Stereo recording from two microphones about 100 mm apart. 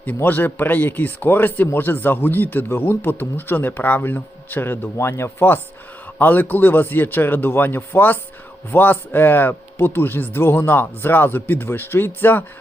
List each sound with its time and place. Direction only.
0.0 s speech: 15° left (ahead or behind)